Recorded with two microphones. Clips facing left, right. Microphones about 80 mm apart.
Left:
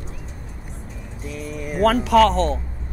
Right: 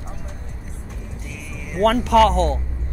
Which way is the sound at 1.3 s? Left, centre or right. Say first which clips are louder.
Left 9 dB; left.